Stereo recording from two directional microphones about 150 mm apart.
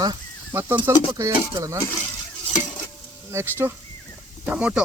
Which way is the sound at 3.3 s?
15° right (ahead or behind).